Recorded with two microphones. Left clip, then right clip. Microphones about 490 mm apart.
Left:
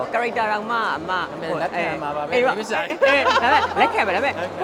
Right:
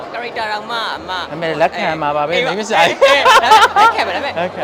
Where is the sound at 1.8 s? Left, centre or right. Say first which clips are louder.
Right 8 dB; right.